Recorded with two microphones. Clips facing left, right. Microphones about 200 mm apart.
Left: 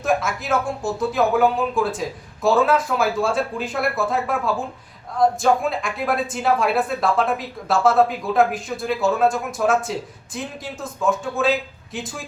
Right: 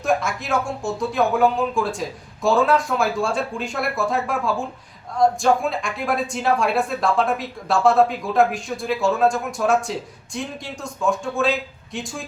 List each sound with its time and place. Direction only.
0.0 s speech: centre (ahead or behind)